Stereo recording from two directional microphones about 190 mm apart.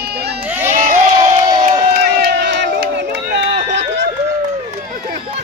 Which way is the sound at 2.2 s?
65° right (ahead or behind).